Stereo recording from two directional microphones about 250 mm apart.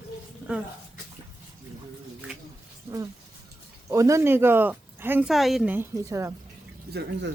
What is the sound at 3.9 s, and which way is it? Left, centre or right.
Speech, centre.